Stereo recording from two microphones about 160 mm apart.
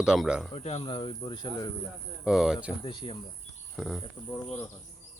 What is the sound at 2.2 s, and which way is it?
Speech, centre (ahead or behind).